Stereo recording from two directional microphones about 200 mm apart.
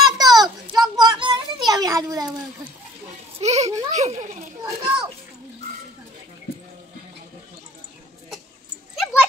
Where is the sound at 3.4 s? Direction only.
35° right (ahead or behind).